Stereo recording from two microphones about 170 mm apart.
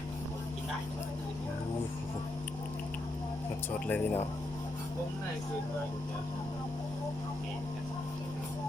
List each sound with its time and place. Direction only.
3.8 s speech: 10° left (ahead or behind)